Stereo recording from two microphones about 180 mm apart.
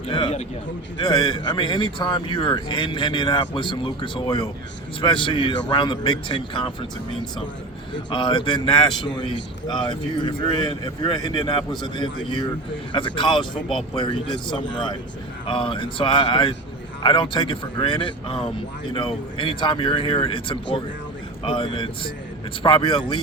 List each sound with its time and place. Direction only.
0.1 s a man's voice: 30° left (ahead or behind)
8.1 s a man's voice: 25° left (ahead or behind)